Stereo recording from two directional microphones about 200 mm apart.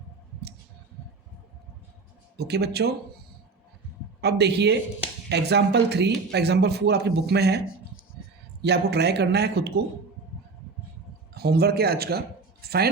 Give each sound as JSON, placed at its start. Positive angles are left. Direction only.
{"t": 2.4, "sound": "speech", "side_deg": -55}
{"t": 4.2, "sound": "speech", "side_deg": -55}
{"t": 8.6, "sound": "speech", "side_deg": -55}
{"t": 11.3, "sound": "speech", "side_deg": -50}